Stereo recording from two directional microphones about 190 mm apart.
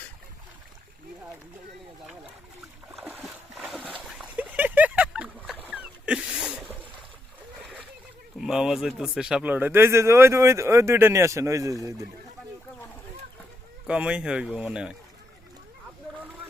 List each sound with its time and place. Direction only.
2.9 s a sound: 5° right (ahead or behind)
7.6 s splash: 5° right (ahead or behind)
8.4 s speech: 5° right (ahead or behind)
13.8 s speech: 5° right (ahead or behind)